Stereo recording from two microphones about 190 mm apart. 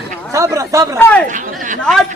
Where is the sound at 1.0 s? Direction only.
10° left (ahead or behind).